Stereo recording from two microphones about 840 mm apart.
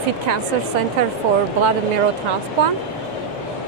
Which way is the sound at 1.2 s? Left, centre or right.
Right.